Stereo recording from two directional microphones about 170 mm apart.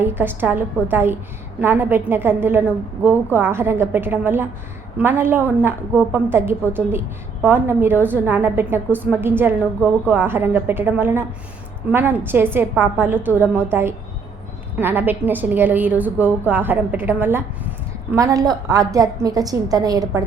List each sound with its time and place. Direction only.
0.0 s a woman's voice: 10° right (ahead or behind)